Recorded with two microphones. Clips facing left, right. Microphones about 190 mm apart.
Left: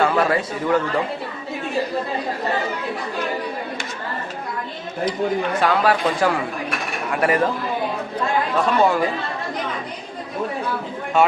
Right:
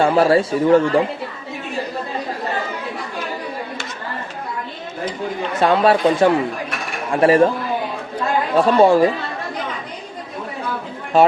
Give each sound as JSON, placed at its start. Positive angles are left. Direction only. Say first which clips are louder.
{"t": 0.0, "sound": "a man's voice", "louder": "right 5 dB", "side_deg": -30}
{"t": 5.5, "sound": "speech", "louder": "right 6 dB", "side_deg": -25}
{"t": 8.5, "sound": "speech", "louder": "right 7 dB", "side_deg": -30}
{"t": 11.1, "sound": "speech", "louder": "right 4 dB", "side_deg": -35}